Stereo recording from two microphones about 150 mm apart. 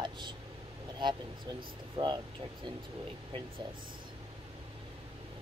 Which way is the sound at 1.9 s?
30° right (ahead or behind).